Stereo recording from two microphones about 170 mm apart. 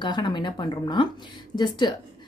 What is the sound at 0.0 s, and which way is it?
Speech, 25° left (ahead or behind).